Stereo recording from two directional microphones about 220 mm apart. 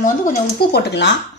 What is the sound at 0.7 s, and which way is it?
Speech, 50° left (ahead or behind).